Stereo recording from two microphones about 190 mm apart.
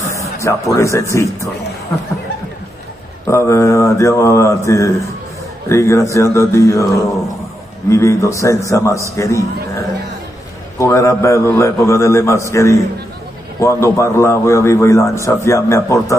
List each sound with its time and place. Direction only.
0.4 s a man's voice: 15° left (ahead or behind)
3.3 s a man's voice: 15° left (ahead or behind)
10.8 s a man's voice: 15° left (ahead or behind)